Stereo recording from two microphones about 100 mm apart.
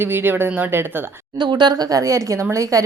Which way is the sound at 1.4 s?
50° right (ahead or behind).